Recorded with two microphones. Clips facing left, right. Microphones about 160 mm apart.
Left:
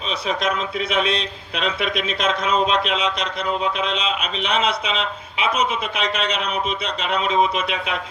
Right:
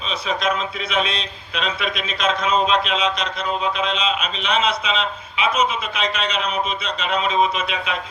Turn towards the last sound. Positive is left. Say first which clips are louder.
# even
turn(degrees=60)  # may be behind; listen again after turning